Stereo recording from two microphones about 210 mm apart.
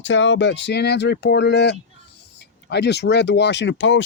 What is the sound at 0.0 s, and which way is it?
Speech, 60° left (ahead or behind).